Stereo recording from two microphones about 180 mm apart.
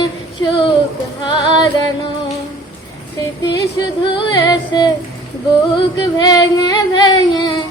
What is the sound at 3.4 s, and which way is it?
Female singing, 20° left (ahead or behind).